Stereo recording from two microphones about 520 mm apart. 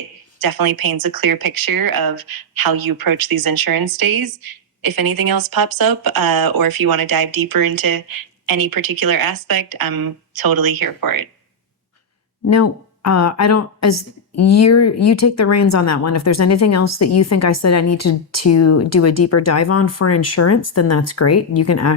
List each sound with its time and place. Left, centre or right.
0.4 s speech: right
12.5 s a woman's voice: left